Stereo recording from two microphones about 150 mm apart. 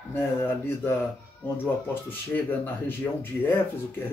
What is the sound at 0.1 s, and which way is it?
Speech, 15° left (ahead or behind).